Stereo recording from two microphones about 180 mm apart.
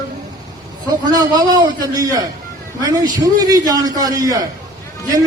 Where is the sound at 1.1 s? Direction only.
20° right (ahead or behind).